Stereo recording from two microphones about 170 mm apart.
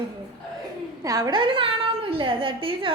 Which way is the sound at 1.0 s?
20° right (ahead or behind).